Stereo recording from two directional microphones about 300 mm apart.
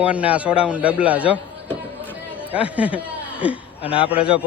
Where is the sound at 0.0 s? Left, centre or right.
Centre.